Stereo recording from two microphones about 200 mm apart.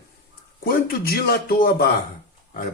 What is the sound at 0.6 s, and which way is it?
Speech, 50° left (ahead or behind).